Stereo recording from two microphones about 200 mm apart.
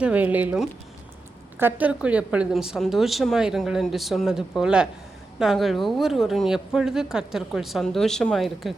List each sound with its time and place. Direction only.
0.0 s a woman's voice: 5° right (ahead or behind)